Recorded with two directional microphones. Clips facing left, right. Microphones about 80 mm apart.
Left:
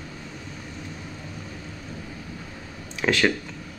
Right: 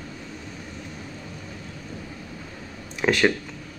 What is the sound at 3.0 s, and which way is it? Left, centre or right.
Speech, centre.